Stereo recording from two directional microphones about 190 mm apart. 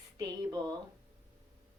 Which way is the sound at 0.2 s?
20° right (ahead or behind).